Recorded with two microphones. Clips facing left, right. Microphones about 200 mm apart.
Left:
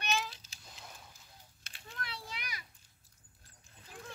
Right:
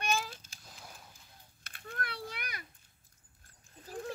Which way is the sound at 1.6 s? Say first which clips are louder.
Right 5 dB; 55° right (ahead or behind).